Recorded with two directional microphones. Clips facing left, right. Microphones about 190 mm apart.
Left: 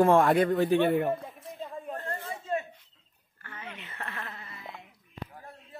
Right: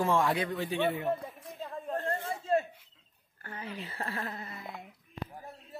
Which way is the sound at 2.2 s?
30° right (ahead or behind).